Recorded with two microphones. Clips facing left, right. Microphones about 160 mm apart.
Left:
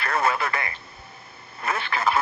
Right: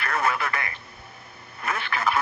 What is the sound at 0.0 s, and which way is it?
Radio, 30° left (ahead or behind).